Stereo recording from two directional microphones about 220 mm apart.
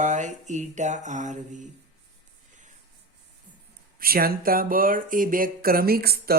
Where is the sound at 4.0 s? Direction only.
40° right (ahead or behind).